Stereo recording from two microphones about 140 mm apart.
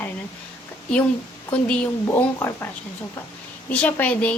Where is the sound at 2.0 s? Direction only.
20° left (ahead or behind).